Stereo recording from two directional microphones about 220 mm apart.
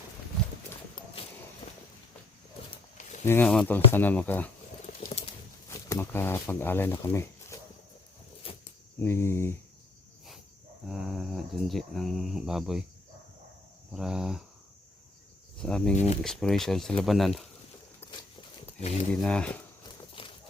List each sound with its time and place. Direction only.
1.6 s a sound: 20° left (ahead or behind)
2.6 s walk: 35° left (ahead or behind)
3.2 s speech: 10° left (ahead or behind)
5.0 s typing: 30° left (ahead or behind)
5.7 s speech: 10° left (ahead or behind)
9.0 s speech: 10° left (ahead or behind)
10.8 s speech: 5° right (ahead or behind)
13.9 s speech: centre (ahead or behind)
15.5 s speech: 5° left (ahead or behind)
18.1 s a sound: 25° left (ahead or behind)
19.1 s speech: 5° left (ahead or behind)
20.2 s clip-clop: 25° left (ahead or behind)